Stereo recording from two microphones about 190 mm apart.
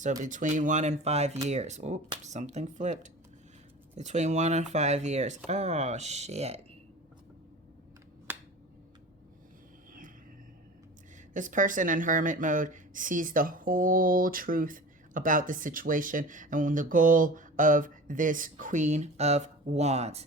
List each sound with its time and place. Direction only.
0.2 s speech: 40° right (ahead or behind)
8.3 s finger snapping: 10° right (ahead or behind)
11.3 s speech: 45° right (ahead or behind)